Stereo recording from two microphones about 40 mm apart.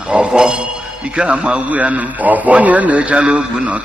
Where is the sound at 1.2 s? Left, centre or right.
Right.